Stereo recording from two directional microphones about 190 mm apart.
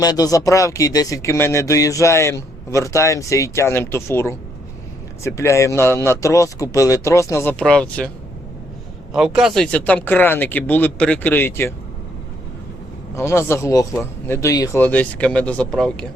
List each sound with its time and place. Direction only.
0.0 s speech: 20° left (ahead or behind)
7.6 s speech: 5° left (ahead or behind)
9.1 s speech: 5° right (ahead or behind)
13.1 s speech: 15° left (ahead or behind)